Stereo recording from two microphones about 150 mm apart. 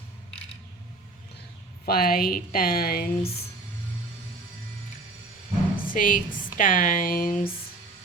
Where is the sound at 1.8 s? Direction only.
85° left.